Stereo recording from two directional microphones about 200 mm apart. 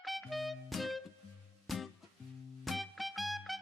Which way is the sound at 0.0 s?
Centre (ahead or behind).